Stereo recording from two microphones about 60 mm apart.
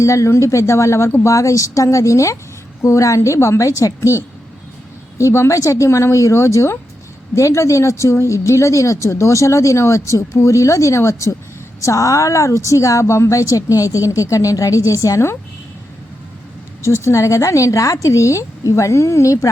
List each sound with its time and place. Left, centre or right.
0.0 s a woman's voice: left
16.8 s a woman's voice: left